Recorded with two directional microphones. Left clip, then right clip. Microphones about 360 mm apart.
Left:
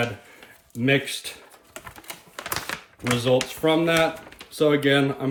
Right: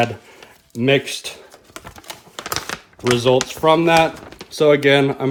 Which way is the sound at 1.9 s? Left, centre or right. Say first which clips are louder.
Right 4 dB; centre.